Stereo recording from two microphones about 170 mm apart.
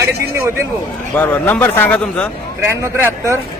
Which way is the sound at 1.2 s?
10° left (ahead or behind).